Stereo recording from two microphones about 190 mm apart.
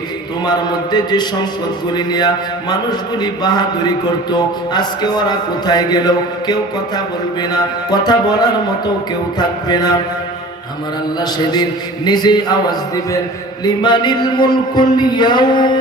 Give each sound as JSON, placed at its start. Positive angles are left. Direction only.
{"t": 0.4, "sound": "a man's voice", "side_deg": 20}
{"t": 11.2, "sound": "a man's voice", "side_deg": 20}